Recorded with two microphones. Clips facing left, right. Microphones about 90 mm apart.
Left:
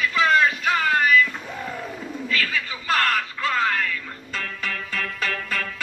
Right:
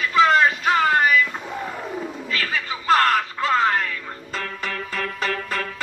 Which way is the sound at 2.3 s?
35° right (ahead or behind).